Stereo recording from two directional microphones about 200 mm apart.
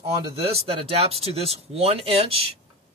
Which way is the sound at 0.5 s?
30° right (ahead or behind).